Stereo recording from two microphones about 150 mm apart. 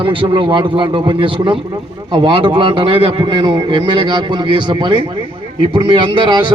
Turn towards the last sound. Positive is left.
turn(degrees=-30)  # may be behind; listen again after turning